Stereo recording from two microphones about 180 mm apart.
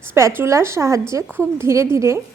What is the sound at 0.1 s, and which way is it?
A woman's voice, 15° right (ahead or behind).